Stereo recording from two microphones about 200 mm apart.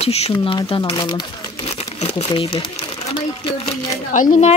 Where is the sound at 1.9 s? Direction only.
35° left (ahead or behind).